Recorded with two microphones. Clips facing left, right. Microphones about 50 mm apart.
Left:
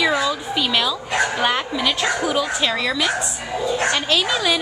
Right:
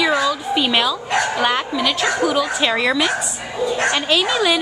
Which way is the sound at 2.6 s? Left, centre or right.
Centre.